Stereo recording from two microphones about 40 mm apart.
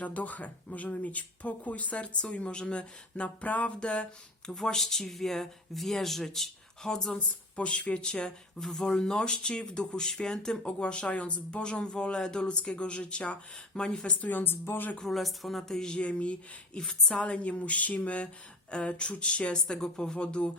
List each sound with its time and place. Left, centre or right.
0.0 s speech: left
4.4 s speech: centre
7.1 s speech: left
8.0 s speech: centre
14.2 s speech: left
14.5 s speech: left
15.0 s speech: centre
16.0 s speech: left